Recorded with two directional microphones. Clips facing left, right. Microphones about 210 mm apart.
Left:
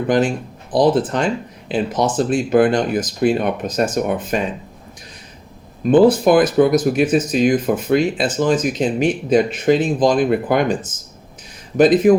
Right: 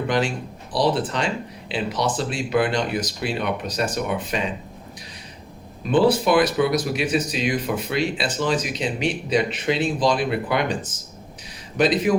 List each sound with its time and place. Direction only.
0.1 s speech: 50° left (ahead or behind)
5.9 s speech: 45° left (ahead or behind)
11.8 s speech: 45° left (ahead or behind)